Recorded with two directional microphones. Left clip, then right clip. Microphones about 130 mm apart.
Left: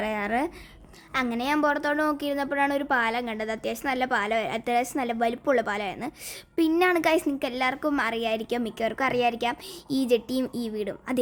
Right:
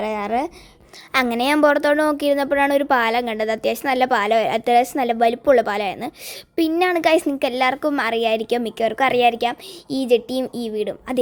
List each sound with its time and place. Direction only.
0.0 s speech: 15° right (ahead or behind)
1.1 s a woman's voice: 60° right (ahead or behind); by 6.1 s 25° right (ahead or behind)
6.6 s speech: 10° right (ahead or behind)
7.1 s a woman's voice: 30° right (ahead or behind); by 11.2 s 15° right (ahead or behind)